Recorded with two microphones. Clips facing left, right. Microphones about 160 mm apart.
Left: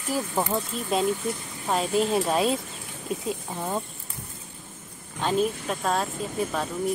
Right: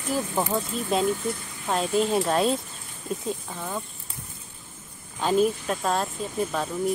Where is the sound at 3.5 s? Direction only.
20° left (ahead or behind).